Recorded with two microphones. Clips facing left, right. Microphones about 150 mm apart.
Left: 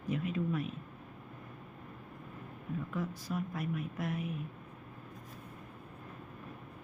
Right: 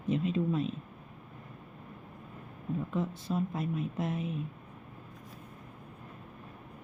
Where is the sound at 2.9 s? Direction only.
25° right (ahead or behind).